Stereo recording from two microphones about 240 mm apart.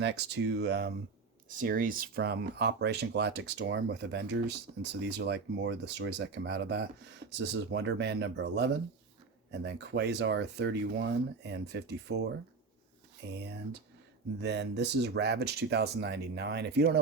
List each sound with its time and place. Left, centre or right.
0.0 s speech: right
14.4 s speech: right